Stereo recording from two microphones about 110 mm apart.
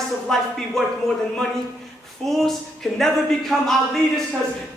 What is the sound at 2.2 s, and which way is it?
Speech, 5° left (ahead or behind).